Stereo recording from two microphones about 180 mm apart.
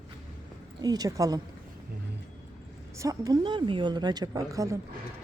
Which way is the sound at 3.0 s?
20° right (ahead or behind).